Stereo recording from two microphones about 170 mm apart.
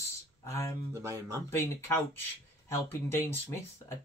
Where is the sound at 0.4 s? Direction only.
15° left (ahead or behind).